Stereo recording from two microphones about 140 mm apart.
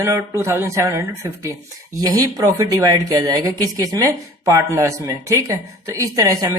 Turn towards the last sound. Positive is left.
turn(degrees=-25)  # may be behind; listen again after turning